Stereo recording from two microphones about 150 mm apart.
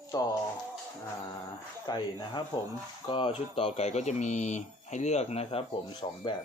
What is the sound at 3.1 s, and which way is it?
Speech, 35° left (ahead or behind).